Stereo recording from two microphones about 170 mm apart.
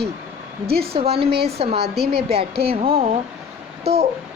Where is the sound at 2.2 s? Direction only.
35° right (ahead or behind).